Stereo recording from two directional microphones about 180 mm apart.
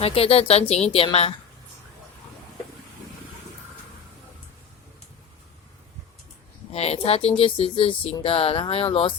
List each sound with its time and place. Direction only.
0.0 s speech: 30° left (ahead or behind)
6.7 s speech: 35° left (ahead or behind)